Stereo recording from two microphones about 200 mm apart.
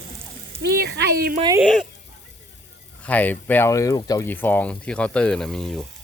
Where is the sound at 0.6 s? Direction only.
55° right (ahead or behind).